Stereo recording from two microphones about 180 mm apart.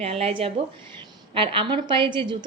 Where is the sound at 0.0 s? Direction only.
35° right (ahead or behind).